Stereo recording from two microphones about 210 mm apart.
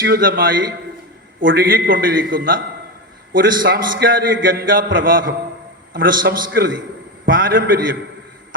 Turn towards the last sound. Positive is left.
turn(degrees=-45)  # may be behind; listen again after turning